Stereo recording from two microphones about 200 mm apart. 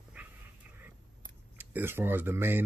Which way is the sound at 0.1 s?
10° right (ahead or behind).